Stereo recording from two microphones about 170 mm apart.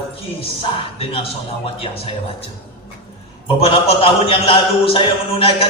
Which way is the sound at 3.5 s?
35° left (ahead or behind).